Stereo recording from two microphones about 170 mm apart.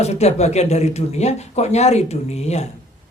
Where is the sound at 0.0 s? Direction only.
40° left (ahead or behind).